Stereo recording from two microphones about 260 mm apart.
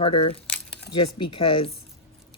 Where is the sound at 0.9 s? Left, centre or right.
Left.